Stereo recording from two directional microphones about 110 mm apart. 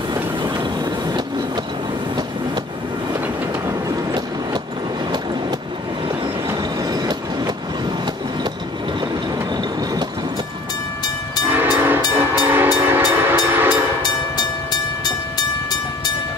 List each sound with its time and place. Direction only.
3.6 s train: 35° right (ahead or behind)
6.8 s train: 35° right (ahead or behind)
11.4 s train: 20° right (ahead or behind)
14.0 s train: 40° left (ahead or behind)